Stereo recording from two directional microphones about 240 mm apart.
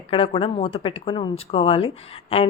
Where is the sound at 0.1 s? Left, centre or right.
Left.